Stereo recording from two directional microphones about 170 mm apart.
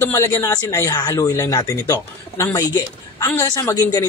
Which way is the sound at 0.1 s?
20° left (ahead or behind).